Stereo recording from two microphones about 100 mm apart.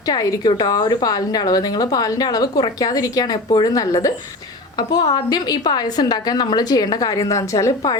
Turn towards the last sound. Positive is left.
turn(degrees=35)  # may be behind; listen again after turning